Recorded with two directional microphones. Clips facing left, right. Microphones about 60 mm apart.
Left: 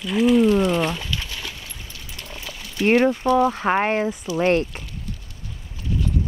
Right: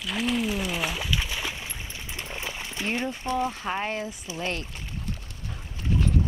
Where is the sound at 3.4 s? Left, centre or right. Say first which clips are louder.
Left 9 dB; left.